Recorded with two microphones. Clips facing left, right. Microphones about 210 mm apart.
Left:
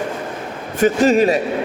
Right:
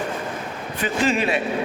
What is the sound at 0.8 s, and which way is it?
Speech, 45° left (ahead or behind).